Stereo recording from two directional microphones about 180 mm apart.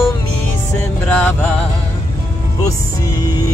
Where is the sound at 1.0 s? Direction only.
5° left (ahead or behind).